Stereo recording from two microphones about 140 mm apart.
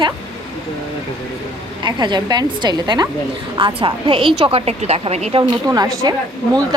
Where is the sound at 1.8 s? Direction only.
30° right (ahead or behind); by 5.4 s 50° right (ahead or behind).